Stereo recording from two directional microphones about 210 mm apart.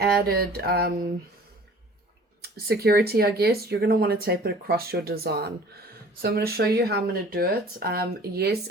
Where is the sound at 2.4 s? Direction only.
50° right (ahead or behind).